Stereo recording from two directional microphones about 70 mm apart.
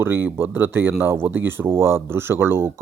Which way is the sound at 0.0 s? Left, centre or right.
Right.